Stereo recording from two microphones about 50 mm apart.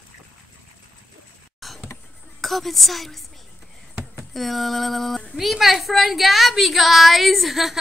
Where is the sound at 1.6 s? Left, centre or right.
Centre.